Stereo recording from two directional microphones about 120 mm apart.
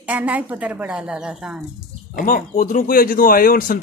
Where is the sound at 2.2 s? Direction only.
90° left.